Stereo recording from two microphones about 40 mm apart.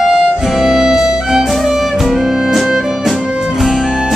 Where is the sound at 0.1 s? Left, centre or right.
Centre.